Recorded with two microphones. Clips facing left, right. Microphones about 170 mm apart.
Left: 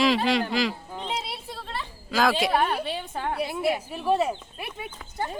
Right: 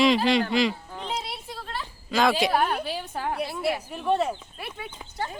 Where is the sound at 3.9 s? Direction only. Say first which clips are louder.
Left 1 dB; 5° left (ahead or behind).